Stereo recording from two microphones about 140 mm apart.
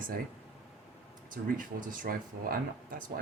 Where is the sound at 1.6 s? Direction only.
70° right (ahead or behind).